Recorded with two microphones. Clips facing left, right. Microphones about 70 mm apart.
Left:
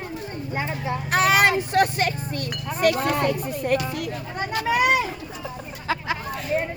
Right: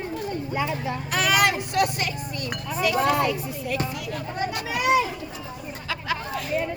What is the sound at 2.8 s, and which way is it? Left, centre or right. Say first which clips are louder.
Speech: left 1 dB; left.